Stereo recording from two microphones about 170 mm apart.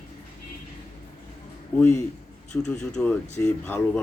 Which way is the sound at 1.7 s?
10° left (ahead or behind).